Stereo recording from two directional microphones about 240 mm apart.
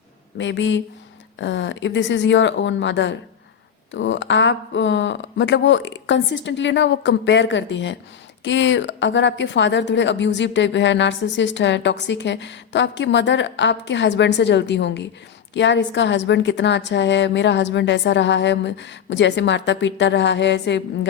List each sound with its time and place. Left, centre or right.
0.3 s speech: left